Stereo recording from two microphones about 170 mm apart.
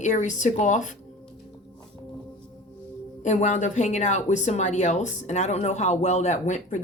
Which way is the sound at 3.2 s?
45° left (ahead or behind).